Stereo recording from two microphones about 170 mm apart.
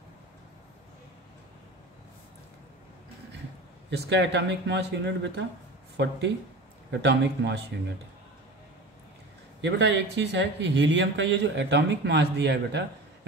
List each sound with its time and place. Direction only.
3.9 s speech: 90° right
6.9 s speech: 90° right
9.6 s speech: 90° right